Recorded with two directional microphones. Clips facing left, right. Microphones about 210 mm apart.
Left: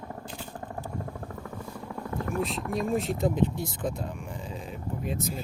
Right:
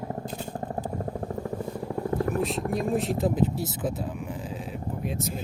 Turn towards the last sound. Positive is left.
turn(degrees=0)  # may be behind; listen again after turning